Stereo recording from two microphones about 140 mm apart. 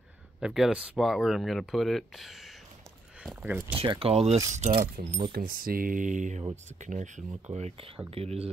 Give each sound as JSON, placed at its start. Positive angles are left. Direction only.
{"t": 0.4, "sound": "speech", "side_deg": -5}
{"t": 3.4, "sound": "speech", "side_deg": -15}
{"t": 3.8, "sound": "speech", "side_deg": -40}
{"t": 4.5, "sound": "speech", "side_deg": -60}
{"t": 5.3, "sound": "speech", "side_deg": -90}
{"t": 7.5, "sound": "speech", "side_deg": -45}